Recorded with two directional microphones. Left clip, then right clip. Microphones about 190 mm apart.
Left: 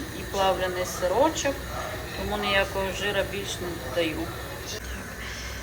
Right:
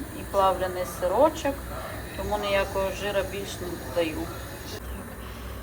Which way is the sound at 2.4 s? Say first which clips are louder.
Left 1 dB; centre (ahead or behind).